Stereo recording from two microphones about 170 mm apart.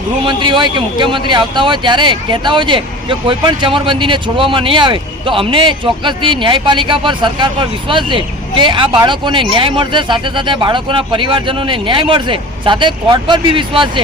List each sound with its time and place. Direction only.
0.3 s speech: 30° right (ahead or behind)